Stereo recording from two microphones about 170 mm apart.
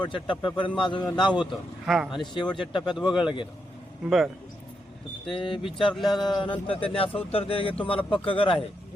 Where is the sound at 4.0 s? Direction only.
5° right (ahead or behind).